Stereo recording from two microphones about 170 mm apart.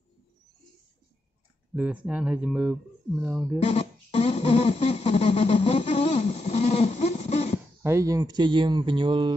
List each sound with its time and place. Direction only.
1.8 s speech: 10° right (ahead or behind)
3.6 s a sound: 40° left (ahead or behind)
7.8 s speech: 15° right (ahead or behind)